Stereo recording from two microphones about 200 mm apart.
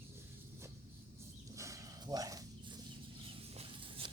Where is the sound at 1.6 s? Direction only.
15° right (ahead or behind).